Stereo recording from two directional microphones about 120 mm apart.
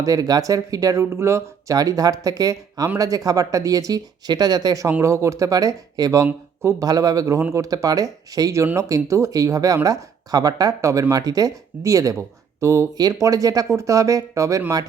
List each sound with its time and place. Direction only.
0.0 s speech: 30° right (ahead or behind)
4.9 s speech: 20° right (ahead or behind)